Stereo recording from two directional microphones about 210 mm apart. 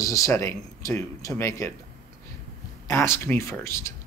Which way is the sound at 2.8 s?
10° left (ahead or behind).